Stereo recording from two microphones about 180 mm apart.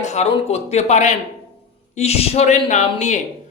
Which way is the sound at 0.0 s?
40° left (ahead or behind).